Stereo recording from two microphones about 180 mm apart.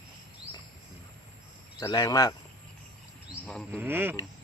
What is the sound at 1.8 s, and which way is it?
Speech, 20° left (ahead or behind).